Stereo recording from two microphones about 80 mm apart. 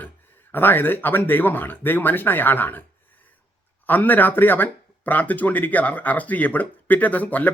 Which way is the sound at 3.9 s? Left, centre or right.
Left.